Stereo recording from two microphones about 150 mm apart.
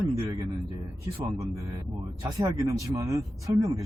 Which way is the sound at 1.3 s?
20° right (ahead or behind).